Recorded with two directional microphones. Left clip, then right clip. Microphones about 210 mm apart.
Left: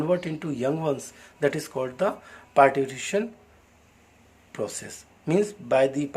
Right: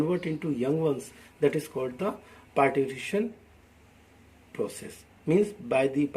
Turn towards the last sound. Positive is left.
turn(degrees=15)  # may be behind; listen again after turning